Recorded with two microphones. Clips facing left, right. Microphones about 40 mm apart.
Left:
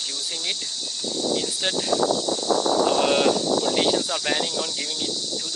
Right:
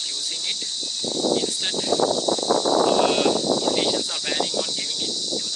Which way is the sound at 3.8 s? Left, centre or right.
Centre.